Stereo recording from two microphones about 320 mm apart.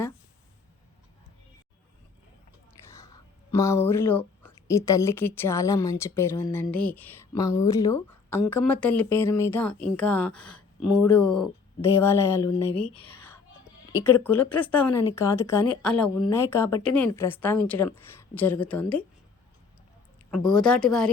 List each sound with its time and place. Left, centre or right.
2.9 s a woman's voice: centre
10.5 s a sound: centre
11.2 s speech: left
11.8 s speech: centre
13.1 s whispering: centre
14.0 s a woman's voice: centre
20.5 s a woman's voice: centre